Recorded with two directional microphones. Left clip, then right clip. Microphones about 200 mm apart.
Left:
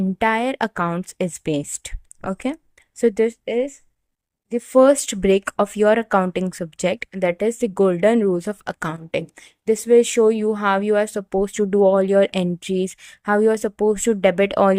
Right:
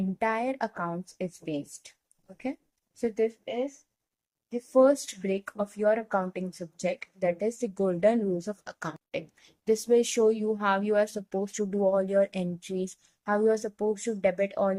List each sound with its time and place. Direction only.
0.2 s speech: 45° left (ahead or behind)
3.0 s speech: 50° left (ahead or behind)